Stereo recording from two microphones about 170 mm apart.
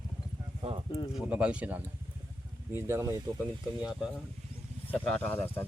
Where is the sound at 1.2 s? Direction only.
10° right (ahead or behind).